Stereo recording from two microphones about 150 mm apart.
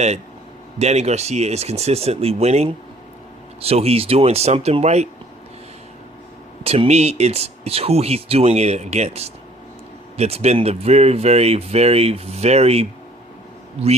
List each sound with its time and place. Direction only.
0.8 s speech: 45° right (ahead or behind)
6.7 s speech: 45° right (ahead or behind)